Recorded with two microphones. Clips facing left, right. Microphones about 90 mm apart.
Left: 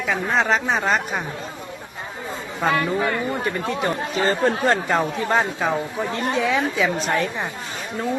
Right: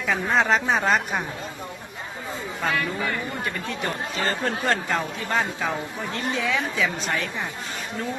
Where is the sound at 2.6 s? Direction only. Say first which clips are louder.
Left 6 dB; 50° left (ahead or behind).